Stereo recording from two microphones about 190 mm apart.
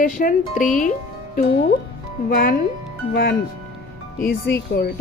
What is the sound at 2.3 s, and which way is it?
A woman's voice, 45° left (ahead or behind).